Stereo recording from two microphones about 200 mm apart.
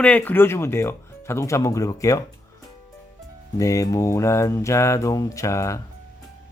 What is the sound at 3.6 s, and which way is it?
Speech, 15° left (ahead or behind).